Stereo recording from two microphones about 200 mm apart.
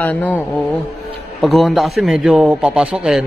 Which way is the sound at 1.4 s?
Centre (ahead or behind).